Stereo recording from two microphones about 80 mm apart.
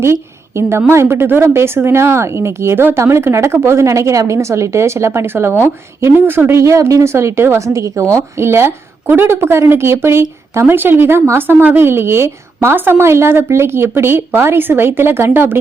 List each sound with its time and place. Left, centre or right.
0.0 s a woman's voice: right
6.6 s speech: right